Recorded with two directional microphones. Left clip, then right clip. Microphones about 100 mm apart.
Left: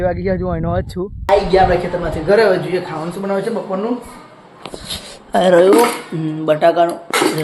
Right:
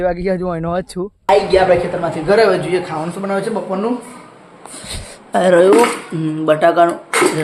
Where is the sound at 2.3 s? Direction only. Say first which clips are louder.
Even; 35° right (ahead or behind).